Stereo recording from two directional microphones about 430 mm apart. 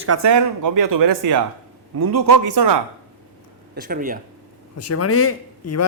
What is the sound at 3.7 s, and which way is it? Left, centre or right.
Speech, centre.